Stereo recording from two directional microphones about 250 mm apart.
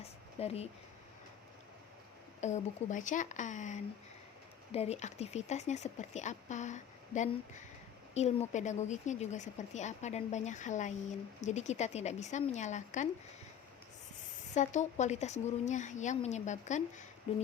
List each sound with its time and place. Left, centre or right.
0.0 s a sound: left
2.4 s speech: left
14.5 s speech: left